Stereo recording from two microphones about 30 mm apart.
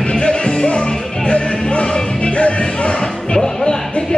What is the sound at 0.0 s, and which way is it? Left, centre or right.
Music, left.